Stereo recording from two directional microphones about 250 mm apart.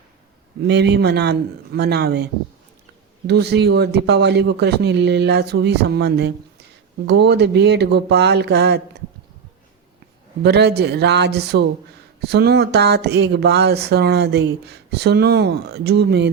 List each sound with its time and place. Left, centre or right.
0.7 s a man's voice: right
10.4 s a man's voice: right